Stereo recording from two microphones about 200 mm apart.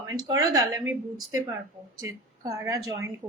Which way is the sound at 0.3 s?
15° right (ahead or behind).